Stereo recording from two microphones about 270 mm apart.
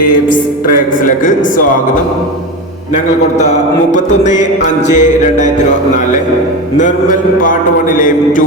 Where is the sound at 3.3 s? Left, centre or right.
Left.